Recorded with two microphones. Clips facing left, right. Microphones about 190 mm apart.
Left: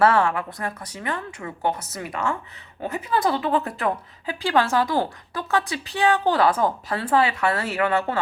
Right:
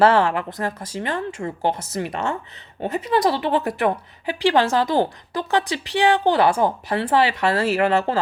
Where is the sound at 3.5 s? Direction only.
25° right (ahead or behind).